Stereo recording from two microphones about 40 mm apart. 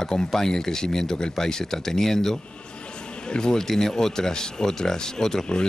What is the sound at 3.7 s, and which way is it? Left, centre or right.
Speech, centre.